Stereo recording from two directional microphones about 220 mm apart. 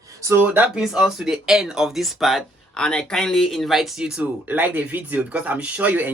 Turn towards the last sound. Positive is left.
turn(degrees=-5)  # may be behind; listen again after turning